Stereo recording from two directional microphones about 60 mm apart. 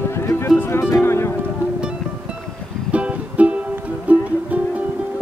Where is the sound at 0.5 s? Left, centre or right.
Left.